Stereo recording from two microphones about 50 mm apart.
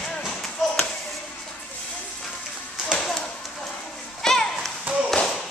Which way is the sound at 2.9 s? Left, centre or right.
Centre.